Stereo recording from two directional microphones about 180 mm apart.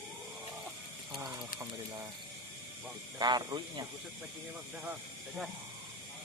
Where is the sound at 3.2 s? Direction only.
25° right (ahead or behind).